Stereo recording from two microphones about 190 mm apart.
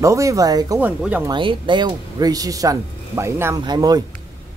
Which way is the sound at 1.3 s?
25° right (ahead or behind).